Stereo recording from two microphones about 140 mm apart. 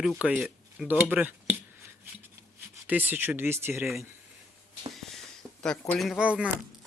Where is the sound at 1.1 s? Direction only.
10° right (ahead or behind).